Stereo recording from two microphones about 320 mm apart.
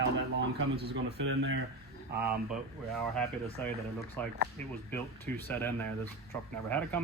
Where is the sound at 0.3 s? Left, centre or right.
Right.